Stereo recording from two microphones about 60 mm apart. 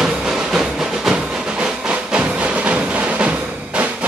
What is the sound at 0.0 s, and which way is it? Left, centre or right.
Train, centre.